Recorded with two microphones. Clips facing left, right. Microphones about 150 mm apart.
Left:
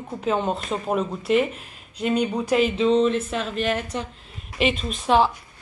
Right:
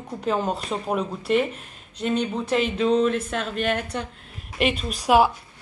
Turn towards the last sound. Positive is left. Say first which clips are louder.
# right 1 dB
turn(degrees=-10)  # may be behind; listen again after turning